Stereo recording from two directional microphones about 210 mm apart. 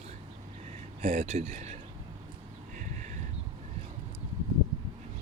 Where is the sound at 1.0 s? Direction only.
35° right (ahead or behind).